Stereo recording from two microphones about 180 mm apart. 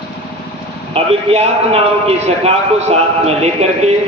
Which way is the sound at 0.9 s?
35° right (ahead or behind).